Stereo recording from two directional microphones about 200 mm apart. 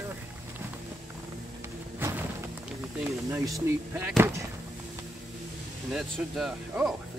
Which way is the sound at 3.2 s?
15° right (ahead or behind).